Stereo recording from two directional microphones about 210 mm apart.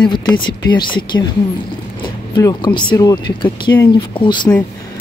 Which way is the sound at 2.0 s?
20° left (ahead or behind).